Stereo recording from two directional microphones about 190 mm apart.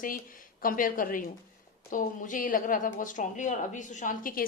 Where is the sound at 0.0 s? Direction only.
45° left (ahead or behind).